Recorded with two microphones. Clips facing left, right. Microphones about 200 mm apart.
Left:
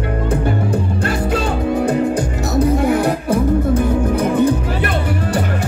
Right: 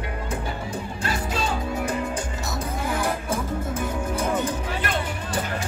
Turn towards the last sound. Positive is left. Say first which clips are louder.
# left 9 dB
turn(degrees=60)  # may be behind; listen again after turning